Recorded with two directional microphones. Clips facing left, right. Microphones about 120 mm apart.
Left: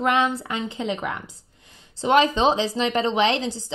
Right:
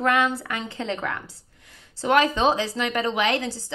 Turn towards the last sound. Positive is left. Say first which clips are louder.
# left 2 dB
turn(degrees=20)  # may be behind; listen again after turning